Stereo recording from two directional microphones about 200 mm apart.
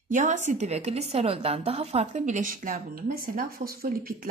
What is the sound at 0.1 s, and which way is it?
Speech, 35° right (ahead or behind).